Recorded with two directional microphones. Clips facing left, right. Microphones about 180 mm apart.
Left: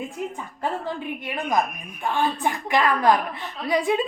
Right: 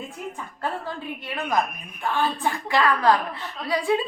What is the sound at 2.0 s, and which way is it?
A woman's voice, 15° left (ahead or behind).